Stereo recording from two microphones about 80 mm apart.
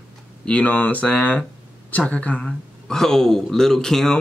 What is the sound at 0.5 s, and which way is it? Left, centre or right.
Speech, centre.